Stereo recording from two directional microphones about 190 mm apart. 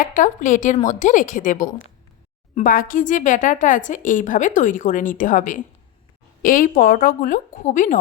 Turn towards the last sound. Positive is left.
turn(degrees=40)  # may be behind; listen again after turning